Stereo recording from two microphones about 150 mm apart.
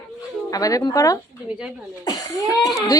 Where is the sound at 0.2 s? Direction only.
20° left (ahead or behind).